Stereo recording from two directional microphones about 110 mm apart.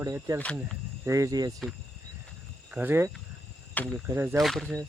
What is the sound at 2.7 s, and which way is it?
Speech, 20° right (ahead or behind).